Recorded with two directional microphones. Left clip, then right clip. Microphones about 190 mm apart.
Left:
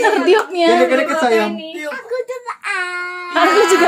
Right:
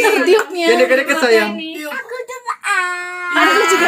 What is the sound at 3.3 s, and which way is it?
Speech, 50° left (ahead or behind).